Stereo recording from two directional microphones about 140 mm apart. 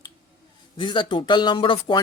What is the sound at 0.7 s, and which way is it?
Speech, 35° left (ahead or behind).